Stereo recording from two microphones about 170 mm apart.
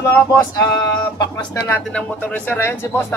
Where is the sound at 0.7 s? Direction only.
25° left (ahead or behind).